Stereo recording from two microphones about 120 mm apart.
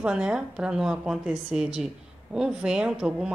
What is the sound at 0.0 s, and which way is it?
A woman's voice, 10° right (ahead or behind).